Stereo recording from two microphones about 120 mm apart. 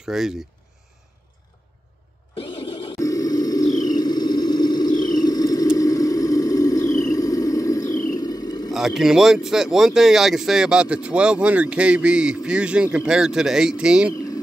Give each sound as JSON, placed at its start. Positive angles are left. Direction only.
{"t": 0.0, "sound": "speech", "side_deg": -5}
{"t": 2.3, "sound": "vehicle", "side_deg": 45}
{"t": 3.0, "sound": "vehicle", "side_deg": 30}
{"t": 8.7, "sound": "speech", "side_deg": 0}